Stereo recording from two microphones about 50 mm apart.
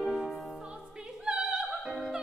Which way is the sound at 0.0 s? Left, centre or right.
Centre.